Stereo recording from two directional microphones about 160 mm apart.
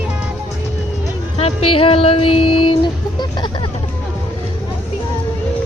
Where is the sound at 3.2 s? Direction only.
30° left (ahead or behind).